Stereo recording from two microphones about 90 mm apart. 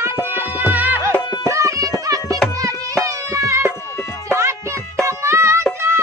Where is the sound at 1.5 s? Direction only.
35° right (ahead or behind).